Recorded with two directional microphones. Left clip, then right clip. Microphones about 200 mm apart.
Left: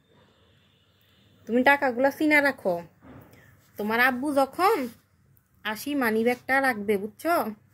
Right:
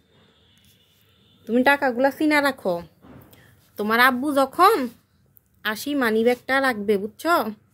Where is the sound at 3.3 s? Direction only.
25° right (ahead or behind).